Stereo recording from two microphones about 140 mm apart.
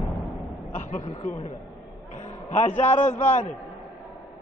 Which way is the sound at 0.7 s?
60° left (ahead or behind).